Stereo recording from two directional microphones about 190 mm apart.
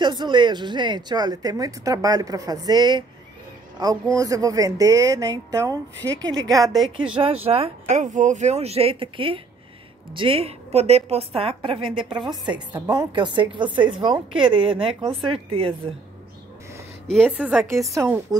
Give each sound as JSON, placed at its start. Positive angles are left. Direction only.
{"t": 0.0, "sound": "a woman's voice", "side_deg": -25}
{"t": 7.4, "sound": "a woman's voice", "side_deg": -30}
{"t": 17.1, "sound": "a woman's voice", "side_deg": -5}
{"t": 17.9, "sound": "a woman's voice", "side_deg": -15}